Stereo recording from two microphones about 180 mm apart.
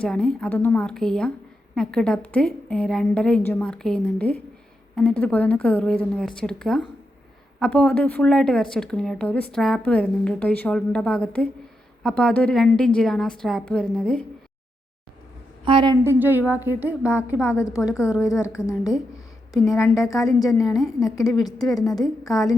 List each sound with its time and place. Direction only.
0.0 s a woman's voice: 5° left (ahead or behind)
15.6 s a woman's voice: 25° right (ahead or behind)
16.0 s a woman's voice: 10° right (ahead or behind)
17.4 s a woman's voice: 15° left (ahead or behind)
17.7 s a woman's voice: 5° right (ahead or behind)
18.2 s a woman's voice: 15° left (ahead or behind)
18.8 s a woman's voice: 5° right (ahead or behind)
20.1 s a woman's voice: 20° left (ahead or behind)
20.7 s a woman's voice: centre (ahead or behind)
21.4 s a woman's voice: 20° left (ahead or behind)